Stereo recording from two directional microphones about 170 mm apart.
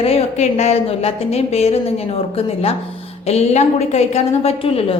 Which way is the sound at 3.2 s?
40° left (ahead or behind).